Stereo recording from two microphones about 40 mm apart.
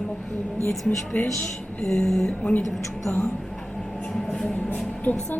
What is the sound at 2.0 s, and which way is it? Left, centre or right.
Speech, centre.